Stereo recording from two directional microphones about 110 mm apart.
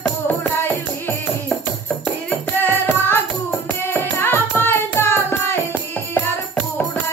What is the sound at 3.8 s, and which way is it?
Music, 20° left (ahead or behind).